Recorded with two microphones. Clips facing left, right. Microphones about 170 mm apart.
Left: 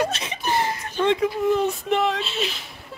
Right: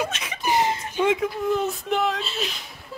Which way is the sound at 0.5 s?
15° right (ahead or behind).